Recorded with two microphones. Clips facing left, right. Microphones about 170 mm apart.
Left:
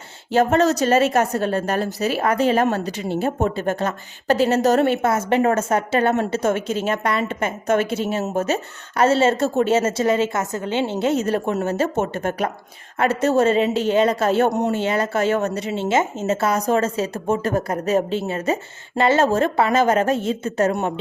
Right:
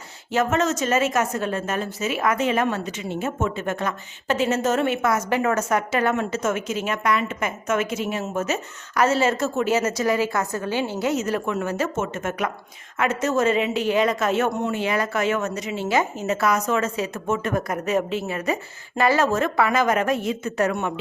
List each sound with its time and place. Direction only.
0.3 s speech: 35° left (ahead or behind)